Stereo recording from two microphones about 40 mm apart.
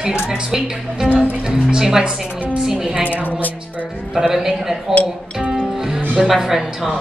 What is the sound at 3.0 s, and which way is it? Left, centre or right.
Speech, right.